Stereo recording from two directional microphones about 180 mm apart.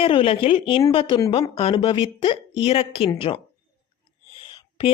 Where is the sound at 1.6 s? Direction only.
30° left (ahead or behind).